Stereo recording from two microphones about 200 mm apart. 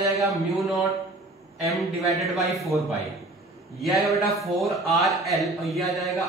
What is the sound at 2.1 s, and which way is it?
Speech, centre (ahead or behind).